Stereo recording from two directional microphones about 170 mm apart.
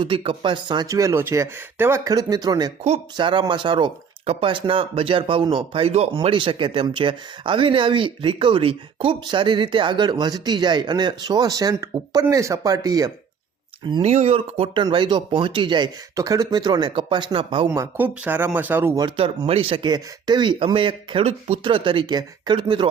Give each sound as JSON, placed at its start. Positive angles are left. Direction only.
{"t": 0.0, "sound": "speech", "side_deg": -30}
{"t": 14.0, "sound": "speech", "side_deg": -40}
{"t": 17.7, "sound": "speech", "side_deg": -10}
{"t": 19.0, "sound": "speech", "side_deg": -30}